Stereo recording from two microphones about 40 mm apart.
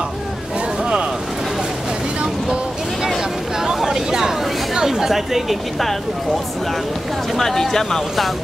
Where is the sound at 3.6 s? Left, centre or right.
Centre.